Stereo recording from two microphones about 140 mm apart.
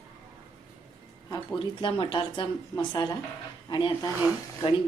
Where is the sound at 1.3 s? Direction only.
30° left (ahead or behind).